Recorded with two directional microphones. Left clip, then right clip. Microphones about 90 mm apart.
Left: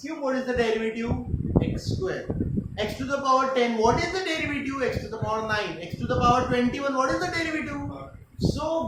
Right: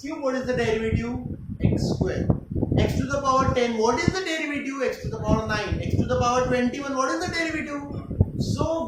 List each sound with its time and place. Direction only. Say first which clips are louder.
0.4 s a man's voice: left 1 dB; centre (ahead or behind)
2.7 s speech: right 2 dB; 15° right (ahead or behind)
3.8 s speech: left 1 dB; 25° right (ahead or behind)
4.8 s speech: right 2 dB; 15° right (ahead or behind)